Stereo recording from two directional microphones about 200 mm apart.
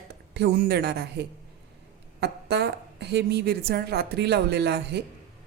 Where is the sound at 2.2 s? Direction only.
55° right (ahead or behind).